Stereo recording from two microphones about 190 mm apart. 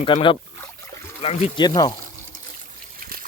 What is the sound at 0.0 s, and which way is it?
Speech, 25° left (ahead or behind).